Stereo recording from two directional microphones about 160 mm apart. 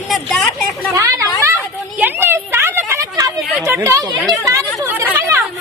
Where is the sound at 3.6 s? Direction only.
15° right (ahead or behind).